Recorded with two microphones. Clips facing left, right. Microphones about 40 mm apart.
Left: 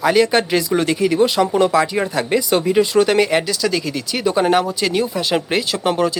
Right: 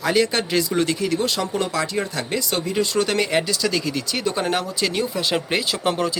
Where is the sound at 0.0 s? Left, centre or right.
Centre.